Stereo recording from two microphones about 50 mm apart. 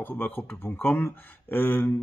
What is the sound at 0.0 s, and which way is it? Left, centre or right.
Speech, left.